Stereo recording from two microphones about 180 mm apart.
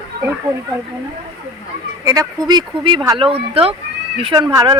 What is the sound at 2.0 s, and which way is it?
Speech, 20° right (ahead or behind).